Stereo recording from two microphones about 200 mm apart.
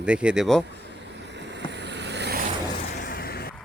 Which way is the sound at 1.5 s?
60° right (ahead or behind).